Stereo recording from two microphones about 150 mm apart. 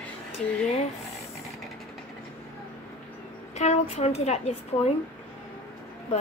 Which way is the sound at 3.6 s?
50° left (ahead or behind).